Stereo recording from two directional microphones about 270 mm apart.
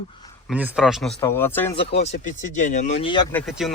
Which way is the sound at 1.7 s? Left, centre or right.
Left.